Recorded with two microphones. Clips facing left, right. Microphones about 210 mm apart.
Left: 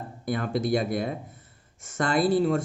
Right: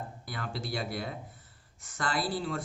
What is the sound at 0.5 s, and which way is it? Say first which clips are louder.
Speech: left 10 dB; 20° left (ahead or behind).